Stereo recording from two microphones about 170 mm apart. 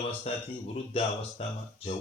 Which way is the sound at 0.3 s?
35° left (ahead or behind).